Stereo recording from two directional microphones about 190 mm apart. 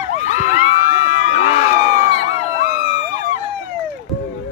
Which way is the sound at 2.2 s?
35° left (ahead or behind).